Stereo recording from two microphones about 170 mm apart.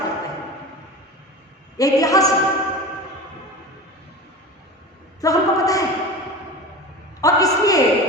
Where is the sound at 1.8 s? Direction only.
20° left (ahead or behind).